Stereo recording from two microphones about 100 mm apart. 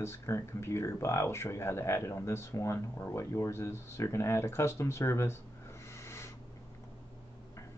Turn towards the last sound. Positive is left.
turn(degrees=25)  # may be behind; listen again after turning